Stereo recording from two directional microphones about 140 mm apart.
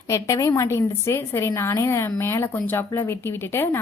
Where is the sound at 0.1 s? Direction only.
20° left (ahead or behind).